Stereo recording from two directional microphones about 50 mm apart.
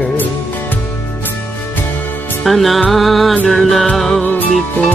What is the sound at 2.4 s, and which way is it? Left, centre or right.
Music, centre.